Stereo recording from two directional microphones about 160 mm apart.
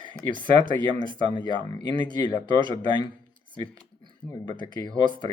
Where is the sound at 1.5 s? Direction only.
30° right (ahead or behind).